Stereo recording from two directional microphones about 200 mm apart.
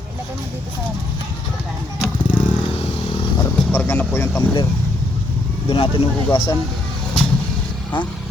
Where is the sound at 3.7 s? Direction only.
10° left (ahead or behind).